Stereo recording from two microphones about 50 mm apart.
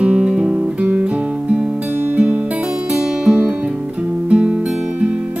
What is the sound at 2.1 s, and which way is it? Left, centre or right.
Music, right.